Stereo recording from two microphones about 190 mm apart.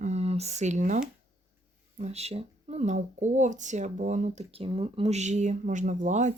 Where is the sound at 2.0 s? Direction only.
35° right (ahead or behind).